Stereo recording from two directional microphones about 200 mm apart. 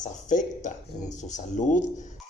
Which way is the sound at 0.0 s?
40° left (ahead or behind).